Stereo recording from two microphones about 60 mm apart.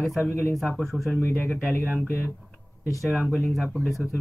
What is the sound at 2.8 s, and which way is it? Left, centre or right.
Speech, left.